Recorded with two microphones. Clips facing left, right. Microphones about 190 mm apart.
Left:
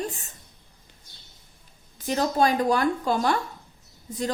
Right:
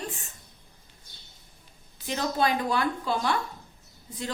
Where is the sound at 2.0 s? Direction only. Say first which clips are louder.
Left 4 dB; 45° left (ahead or behind).